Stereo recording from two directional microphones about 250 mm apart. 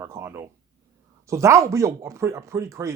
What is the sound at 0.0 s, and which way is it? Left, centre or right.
Speech, centre.